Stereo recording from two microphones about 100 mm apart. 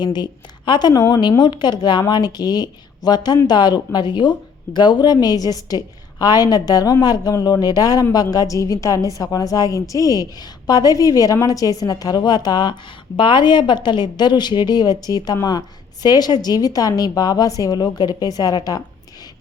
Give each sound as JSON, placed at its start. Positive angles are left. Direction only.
{"t": 0.0, "sound": "a woman's voice", "side_deg": 45}